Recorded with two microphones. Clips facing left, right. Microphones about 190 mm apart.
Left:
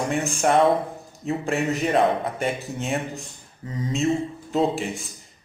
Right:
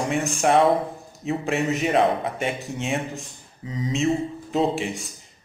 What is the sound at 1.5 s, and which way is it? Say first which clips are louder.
A man's voice: even; centre (ahead or behind).